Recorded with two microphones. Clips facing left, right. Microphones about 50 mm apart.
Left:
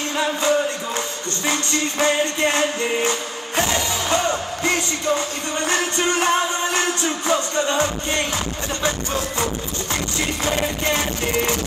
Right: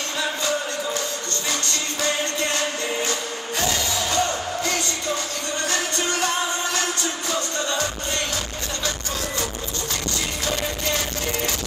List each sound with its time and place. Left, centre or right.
0.4 s music: left
5.7 s music: left